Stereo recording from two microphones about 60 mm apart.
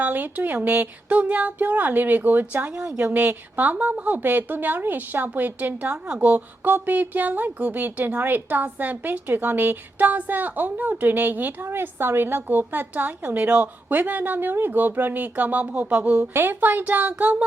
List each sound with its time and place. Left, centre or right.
0.0 s a woman's voice: right
16.1 s speech: right